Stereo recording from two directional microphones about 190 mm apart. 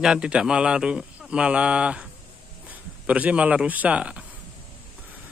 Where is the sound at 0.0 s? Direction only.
5° right (ahead or behind).